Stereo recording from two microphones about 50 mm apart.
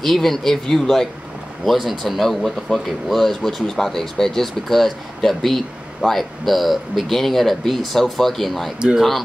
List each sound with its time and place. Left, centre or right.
0.0 s speech: centre
8.7 s speech: centre